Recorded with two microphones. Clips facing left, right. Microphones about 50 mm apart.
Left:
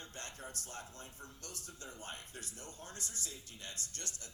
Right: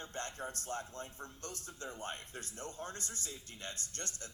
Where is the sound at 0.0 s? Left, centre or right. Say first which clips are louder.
Right 6 dB; right.